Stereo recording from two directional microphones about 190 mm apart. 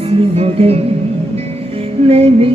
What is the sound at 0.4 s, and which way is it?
Music, 30° right (ahead or behind).